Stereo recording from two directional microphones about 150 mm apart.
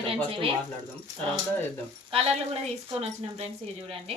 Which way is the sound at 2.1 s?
45° right (ahead or behind).